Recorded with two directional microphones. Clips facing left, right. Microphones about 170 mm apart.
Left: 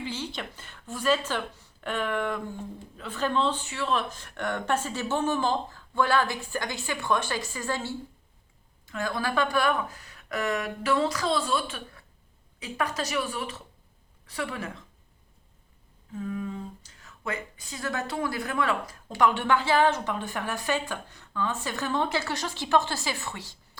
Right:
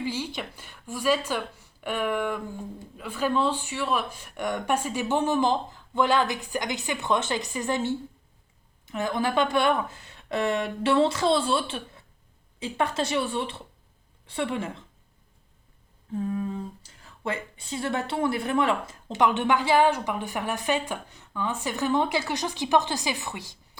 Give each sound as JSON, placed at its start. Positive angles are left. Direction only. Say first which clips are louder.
{"t": 0.0, "sound": "a woman's voice", "louder": "right 3 dB", "side_deg": -10}
{"t": 16.1, "sound": "humming", "louder": "right 4 dB", "side_deg": -35}
{"t": 17.0, "sound": "speech", "louder": "right 3 dB", "side_deg": -30}